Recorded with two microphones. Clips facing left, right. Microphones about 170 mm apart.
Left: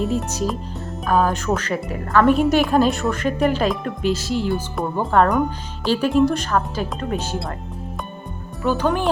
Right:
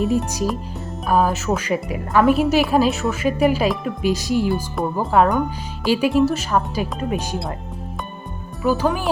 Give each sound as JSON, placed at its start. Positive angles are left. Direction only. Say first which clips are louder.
{"t": 1.0, "sound": "speech", "louder": "even", "side_deg": -10}
{"t": 2.2, "sound": "a woman's voice", "louder": "even", "side_deg": 0}
{"t": 8.6, "sound": "a woman's voice", "louder": "even", "side_deg": 0}